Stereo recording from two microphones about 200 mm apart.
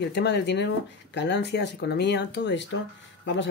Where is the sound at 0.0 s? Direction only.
55° left (ahead or behind).